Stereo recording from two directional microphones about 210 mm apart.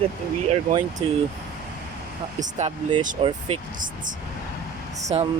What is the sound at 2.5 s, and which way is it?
Speech, 25° right (ahead or behind).